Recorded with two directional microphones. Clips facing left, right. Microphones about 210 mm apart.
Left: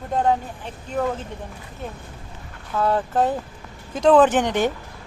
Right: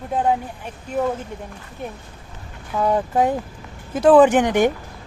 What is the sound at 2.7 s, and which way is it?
Speech, 15° right (ahead or behind).